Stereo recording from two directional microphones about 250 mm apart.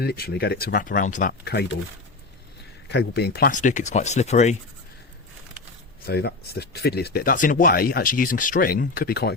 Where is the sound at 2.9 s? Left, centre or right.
Left.